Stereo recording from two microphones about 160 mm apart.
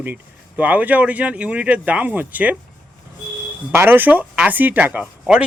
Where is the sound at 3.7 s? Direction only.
15° right (ahead or behind).